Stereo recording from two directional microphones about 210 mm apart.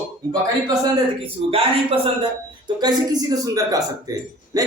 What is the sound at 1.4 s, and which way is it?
A man's voice, 25° right (ahead or behind).